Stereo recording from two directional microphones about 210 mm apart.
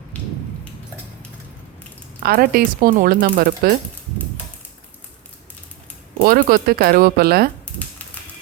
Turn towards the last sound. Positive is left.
turn(degrees=-45)  # may be behind; listen again after turning